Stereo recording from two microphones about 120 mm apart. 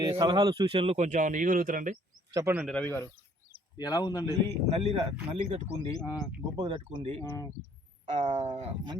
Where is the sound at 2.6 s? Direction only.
10° left (ahead or behind).